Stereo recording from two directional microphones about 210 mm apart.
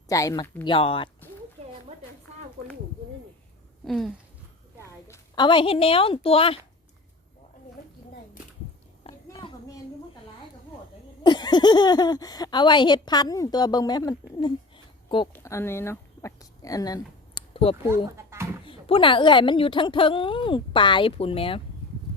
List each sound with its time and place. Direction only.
0.1 s speech: 15° left (ahead or behind)
0.6 s speech: 25° left (ahead or behind)
3.8 s a sound: centre (ahead or behind)
4.9 s a woman's voice: 15° left (ahead or behind)
9.0 s a sound: 25° left (ahead or behind)
11.2 s speech: 20° left (ahead or behind)
17.8 s speech: 10° right (ahead or behind)
18.6 s speech: 25° left (ahead or behind)